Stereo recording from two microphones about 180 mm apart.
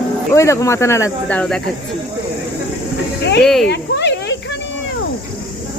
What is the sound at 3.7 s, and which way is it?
Cricket, 75° left (ahead or behind).